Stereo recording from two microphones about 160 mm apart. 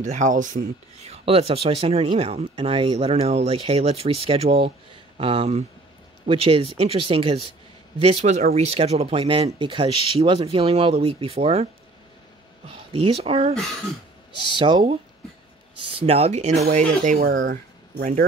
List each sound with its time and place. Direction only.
0.0 s speech: 50° right (ahead or behind)
14.6 s speech: 30° right (ahead or behind)
16.0 s speech: 40° right (ahead or behind)
17.2 s speech: 90° right